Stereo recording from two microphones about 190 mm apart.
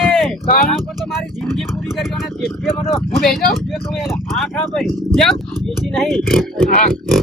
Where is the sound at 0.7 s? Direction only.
Centre (ahead or behind).